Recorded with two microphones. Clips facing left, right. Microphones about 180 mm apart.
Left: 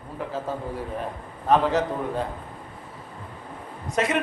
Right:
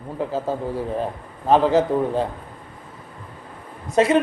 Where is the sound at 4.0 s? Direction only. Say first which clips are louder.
Right 7 dB; 30° right (ahead or behind).